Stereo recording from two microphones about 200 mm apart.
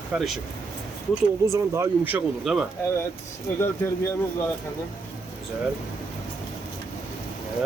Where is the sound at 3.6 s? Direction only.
10° left (ahead or behind).